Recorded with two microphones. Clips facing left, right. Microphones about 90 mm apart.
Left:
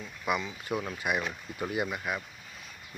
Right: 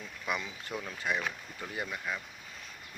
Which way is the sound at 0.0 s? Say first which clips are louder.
Left 4 dB; 5° left (ahead or behind).